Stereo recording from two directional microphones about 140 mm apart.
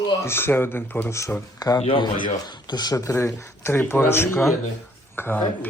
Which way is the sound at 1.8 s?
35° left (ahead or behind).